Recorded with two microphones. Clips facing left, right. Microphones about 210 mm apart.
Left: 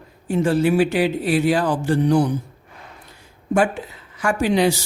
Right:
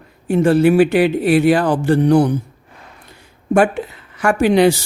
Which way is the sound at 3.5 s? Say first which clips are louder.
Right 5 dB; 65° right (ahead or behind).